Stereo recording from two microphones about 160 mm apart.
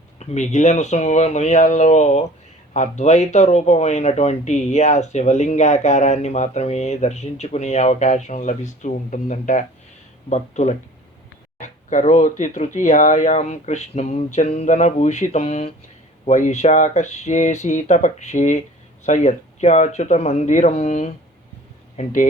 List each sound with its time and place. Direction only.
0.2 s speech: 45° left (ahead or behind)